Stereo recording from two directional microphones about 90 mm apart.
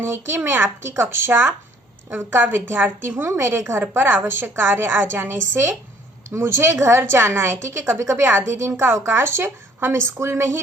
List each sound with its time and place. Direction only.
0.0 s a woman's voice: 30° right (ahead or behind)